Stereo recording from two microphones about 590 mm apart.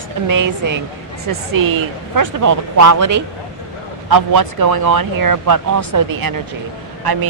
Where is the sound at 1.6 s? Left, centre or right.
Right.